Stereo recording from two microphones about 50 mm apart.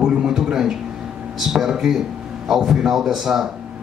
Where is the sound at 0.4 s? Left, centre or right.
Centre.